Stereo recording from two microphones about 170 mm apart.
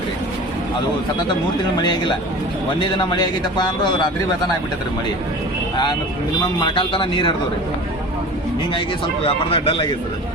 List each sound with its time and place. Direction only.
1.8 s a man's voice: 25° left (ahead or behind)
6.6 s a man's voice: 30° left (ahead or behind)
9.2 s speech: 30° left (ahead or behind)